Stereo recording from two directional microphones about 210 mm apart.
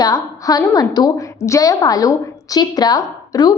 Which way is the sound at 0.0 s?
15° left (ahead or behind).